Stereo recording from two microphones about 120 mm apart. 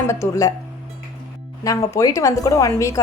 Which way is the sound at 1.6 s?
30° left (ahead or behind).